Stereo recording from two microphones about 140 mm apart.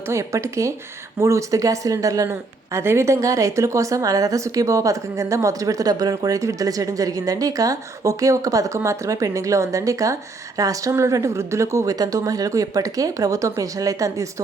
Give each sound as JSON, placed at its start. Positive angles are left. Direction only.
{"t": 0.1, "sound": "speech", "side_deg": -20}